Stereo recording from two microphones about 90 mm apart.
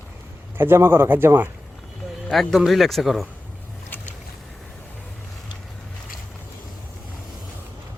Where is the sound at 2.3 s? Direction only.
Centre (ahead or behind).